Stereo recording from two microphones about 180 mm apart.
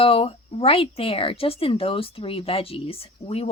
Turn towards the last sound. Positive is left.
turn(degrees=30)  # may be behind; listen again after turning